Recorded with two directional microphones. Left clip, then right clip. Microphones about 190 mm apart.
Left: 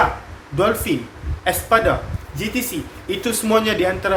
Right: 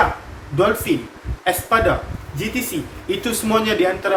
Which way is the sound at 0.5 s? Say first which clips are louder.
Right 1 dB; 40° left (ahead or behind).